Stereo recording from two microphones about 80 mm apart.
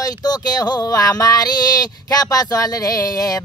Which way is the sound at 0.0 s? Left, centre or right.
Left.